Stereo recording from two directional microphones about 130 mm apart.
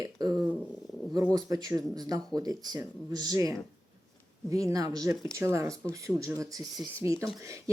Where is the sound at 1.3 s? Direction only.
30° right (ahead or behind).